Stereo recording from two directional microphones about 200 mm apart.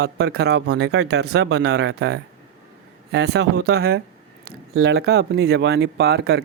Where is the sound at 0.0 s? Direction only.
55° right (ahead or behind).